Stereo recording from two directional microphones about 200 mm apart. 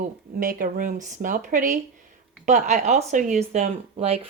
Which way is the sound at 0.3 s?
45° right (ahead or behind).